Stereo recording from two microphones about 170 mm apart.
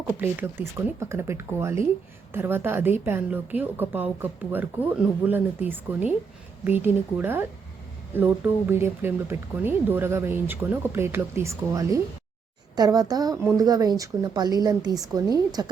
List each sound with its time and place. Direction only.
0.2 s a woman's voice: 15° right (ahead or behind)